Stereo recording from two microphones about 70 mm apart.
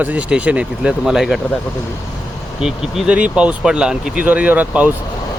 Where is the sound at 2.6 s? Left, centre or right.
Centre.